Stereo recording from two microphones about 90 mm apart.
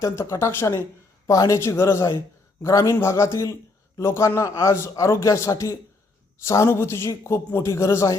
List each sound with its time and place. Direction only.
0.0 s speech: 35° left (ahead or behind)